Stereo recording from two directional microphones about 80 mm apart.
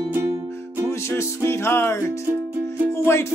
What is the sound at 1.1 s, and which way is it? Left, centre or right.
Music, left.